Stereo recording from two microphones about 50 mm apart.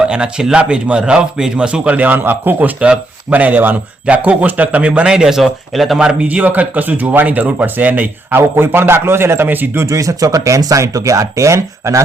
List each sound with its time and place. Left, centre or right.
0.0 s a man's voice: centre; by 2.6 s right
2.6 s speech: right
5.0 s speech: centre
6.1 s speech: right
8.4 s a man's voice: right
9.7 s speech: right